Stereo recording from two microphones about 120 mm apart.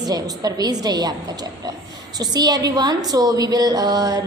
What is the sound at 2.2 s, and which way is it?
A woman's voice, 35° right (ahead or behind).